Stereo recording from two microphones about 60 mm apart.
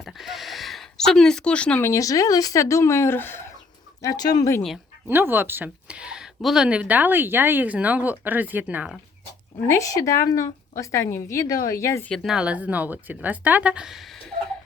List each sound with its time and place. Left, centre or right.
0.0 s a sound: centre
2.0 s speech: left
2.6 s speech: left
4.0 s speech: left
5.0 s speech: right
5.9 s a sound: centre
6.7 s speech: right
9.6 s a woman's voice: left
12.2 s speech: centre
12.5 s speech: right
13.8 s speech: centre